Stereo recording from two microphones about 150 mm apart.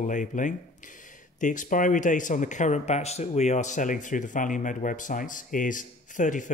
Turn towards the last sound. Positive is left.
turn(degrees=60)  # may be behind; listen again after turning